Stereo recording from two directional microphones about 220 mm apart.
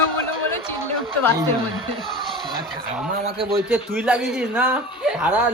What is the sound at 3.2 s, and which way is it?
Speech, 25° right (ahead or behind).